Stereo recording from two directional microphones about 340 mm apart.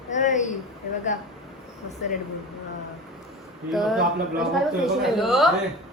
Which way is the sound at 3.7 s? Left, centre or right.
Centre.